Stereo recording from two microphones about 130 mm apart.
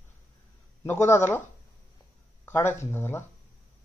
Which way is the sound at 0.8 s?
20° left (ahead or behind).